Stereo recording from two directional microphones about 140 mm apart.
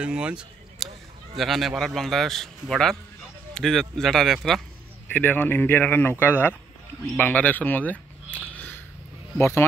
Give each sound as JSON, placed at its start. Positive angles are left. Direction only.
{"t": 0.0, "sound": "a man's voice", "side_deg": -10}
{"t": 5.1, "sound": "speech", "side_deg": 15}